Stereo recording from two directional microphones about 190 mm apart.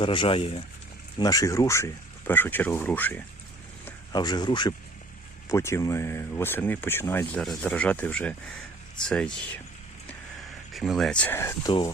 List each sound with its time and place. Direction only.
0.0 s speech: 25° left (ahead or behind)
1.2 s speech: 20° left (ahead or behind)
4.1 s speech: 20° left (ahead or behind); by 9.6 s 5° left (ahead or behind)
10.7 s speech: centre (ahead or behind); by 11.7 s 15° left (ahead or behind)